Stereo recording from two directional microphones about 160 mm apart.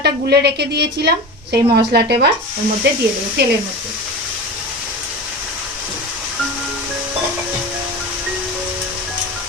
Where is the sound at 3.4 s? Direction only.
90° right.